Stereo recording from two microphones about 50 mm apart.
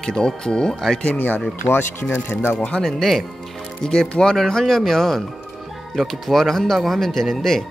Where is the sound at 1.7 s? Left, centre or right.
Left.